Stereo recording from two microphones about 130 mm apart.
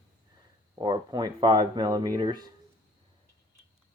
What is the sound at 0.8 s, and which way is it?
Speech, 35° right (ahead or behind).